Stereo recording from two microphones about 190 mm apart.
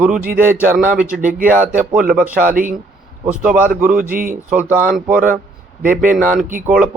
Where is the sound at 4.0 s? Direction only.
45° right (ahead or behind).